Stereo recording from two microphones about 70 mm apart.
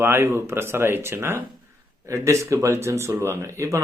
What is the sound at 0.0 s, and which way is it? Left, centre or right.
A man's voice, right.